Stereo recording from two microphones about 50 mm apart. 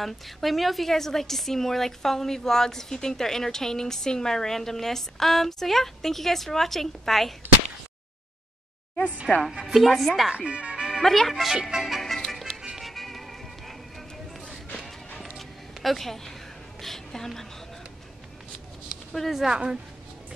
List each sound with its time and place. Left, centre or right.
0.0 s a woman's voice: centre
9.3 s a woman's voice: centre
10.3 s music: right
11.0 s a woman's voice: centre
11.7 s music: centre
15.3 s a sound: centre
19.1 s a woman's voice: centre
19.5 s a woman's voice: centre